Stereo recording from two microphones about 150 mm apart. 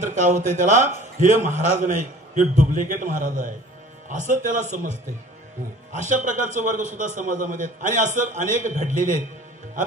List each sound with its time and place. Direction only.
0.0 s a man's voice: 55° right (ahead or behind)
5.9 s a man's voice: 55° right (ahead or behind)